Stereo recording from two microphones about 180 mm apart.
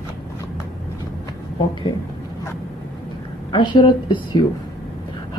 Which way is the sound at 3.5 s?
25° left (ahead or behind).